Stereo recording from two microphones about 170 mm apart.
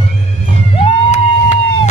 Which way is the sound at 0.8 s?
40° left (ahead or behind).